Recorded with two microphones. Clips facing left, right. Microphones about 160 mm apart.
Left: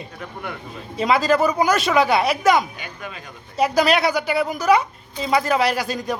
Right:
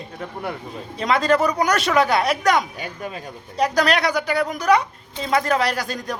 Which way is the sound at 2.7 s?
40° right (ahead or behind).